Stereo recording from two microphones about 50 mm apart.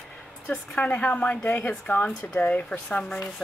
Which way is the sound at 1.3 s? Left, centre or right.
Left.